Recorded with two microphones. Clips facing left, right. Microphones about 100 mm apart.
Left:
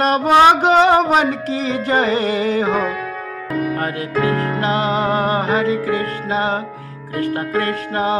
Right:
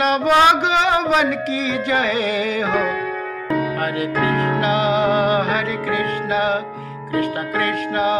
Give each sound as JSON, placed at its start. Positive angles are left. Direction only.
{"t": 0.0, "sound": "music", "side_deg": 40}
{"t": 4.6, "sound": "music", "side_deg": 35}